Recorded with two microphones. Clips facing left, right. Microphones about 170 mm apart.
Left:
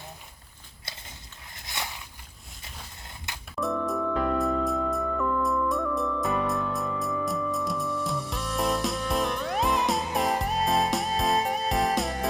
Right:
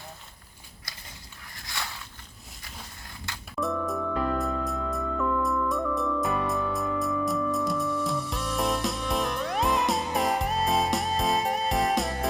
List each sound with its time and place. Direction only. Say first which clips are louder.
1.5 s a sound: left 1 dB; 20° left (ahead or behind)
3.3 s music: even; 20° left (ahead or behind)
3.6 s music: left 1 dB; centre (ahead or behind)